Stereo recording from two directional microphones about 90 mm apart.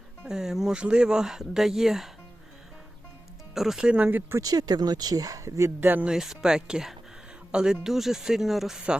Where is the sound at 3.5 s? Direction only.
5° right (ahead or behind); by 4.4 s 20° right (ahead or behind).